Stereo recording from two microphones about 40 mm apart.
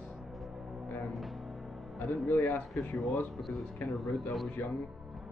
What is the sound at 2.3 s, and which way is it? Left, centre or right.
Speech, left.